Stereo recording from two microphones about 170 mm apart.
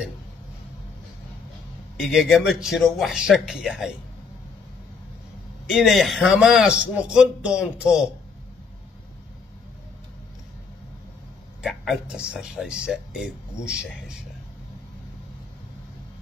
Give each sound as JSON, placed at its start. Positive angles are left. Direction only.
{"t": 2.0, "sound": "speech", "side_deg": 0}
{"t": 5.7, "sound": "speech", "side_deg": 0}
{"t": 11.6, "sound": "speech", "side_deg": 0}